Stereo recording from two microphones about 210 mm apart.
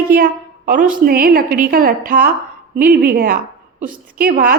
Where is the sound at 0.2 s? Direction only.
40° right (ahead or behind).